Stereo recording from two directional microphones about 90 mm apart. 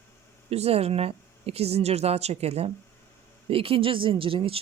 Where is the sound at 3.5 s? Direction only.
90° right.